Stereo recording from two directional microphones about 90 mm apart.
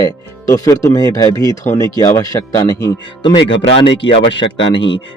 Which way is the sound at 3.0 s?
65° left (ahead or behind).